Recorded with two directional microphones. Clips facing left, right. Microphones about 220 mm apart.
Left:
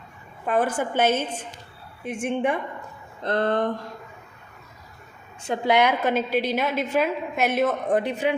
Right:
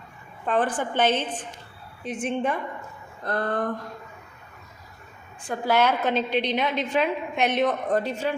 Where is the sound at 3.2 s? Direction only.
25° left (ahead or behind).